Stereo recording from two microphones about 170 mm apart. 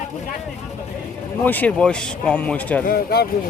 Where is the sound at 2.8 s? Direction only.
65° left (ahead or behind).